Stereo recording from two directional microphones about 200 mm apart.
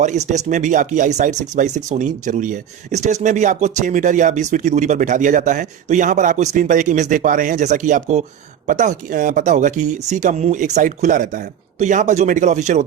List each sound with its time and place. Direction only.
0.0 s speech: 35° right (ahead or behind)